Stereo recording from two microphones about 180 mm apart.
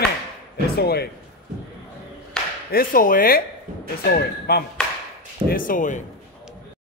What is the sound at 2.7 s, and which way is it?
Speech, 50° left (ahead or behind).